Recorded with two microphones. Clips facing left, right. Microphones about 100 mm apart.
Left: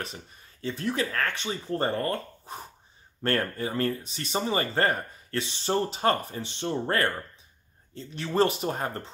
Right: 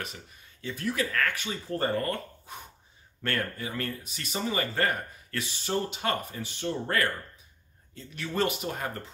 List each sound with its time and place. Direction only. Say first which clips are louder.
0.0 s speech: left 2 dB; 35° left (ahead or behind)